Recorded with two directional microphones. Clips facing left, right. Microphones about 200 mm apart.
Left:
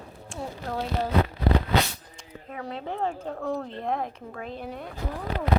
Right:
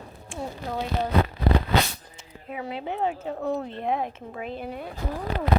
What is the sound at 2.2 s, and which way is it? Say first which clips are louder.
Speech: right 3 dB; 5° right (ahead or behind).